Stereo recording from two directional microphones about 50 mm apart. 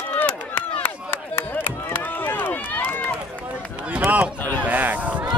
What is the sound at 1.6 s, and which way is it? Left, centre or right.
Run, left.